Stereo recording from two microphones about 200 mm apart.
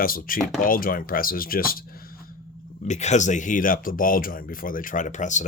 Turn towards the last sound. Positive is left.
turn(degrees=35)  # may be behind; listen again after turning